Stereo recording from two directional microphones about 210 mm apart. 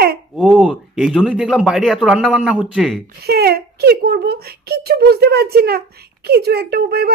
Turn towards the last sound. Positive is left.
turn(degrees=-50)  # may be behind; listen again after turning